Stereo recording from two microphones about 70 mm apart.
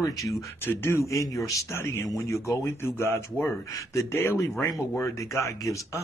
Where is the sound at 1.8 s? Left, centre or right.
Left.